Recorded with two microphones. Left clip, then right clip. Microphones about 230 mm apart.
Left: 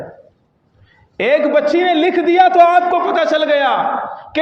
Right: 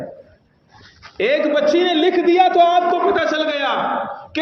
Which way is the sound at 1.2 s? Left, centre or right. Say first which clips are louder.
Left 4 dB; left.